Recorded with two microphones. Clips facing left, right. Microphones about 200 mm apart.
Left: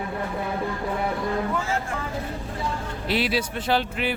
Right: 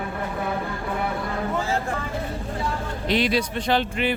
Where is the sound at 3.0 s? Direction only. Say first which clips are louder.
Right 2 dB; 5° left (ahead or behind).